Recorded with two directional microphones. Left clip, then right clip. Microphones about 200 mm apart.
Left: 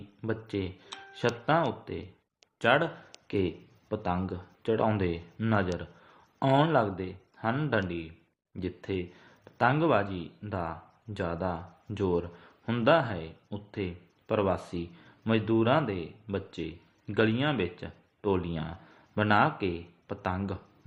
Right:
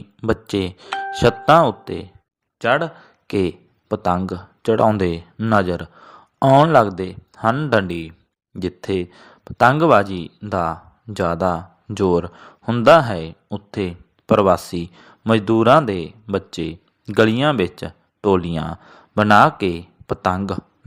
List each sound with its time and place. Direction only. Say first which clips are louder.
0.2 s speech: right 13 dB; 55° right (ahead or behind)
2.6 s speech: right 7 dB; 30° right (ahead or behind)
3.2 s speech: right 10 dB; 50° right (ahead or behind)